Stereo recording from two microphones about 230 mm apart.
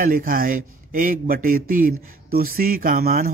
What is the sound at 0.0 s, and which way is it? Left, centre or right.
Mantra, right.